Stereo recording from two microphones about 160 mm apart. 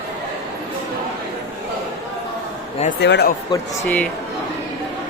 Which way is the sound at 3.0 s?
90° left.